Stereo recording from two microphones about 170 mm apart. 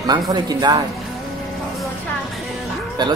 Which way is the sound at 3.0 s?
25° right (ahead or behind).